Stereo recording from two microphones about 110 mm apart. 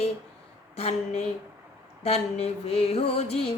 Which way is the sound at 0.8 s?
80° left.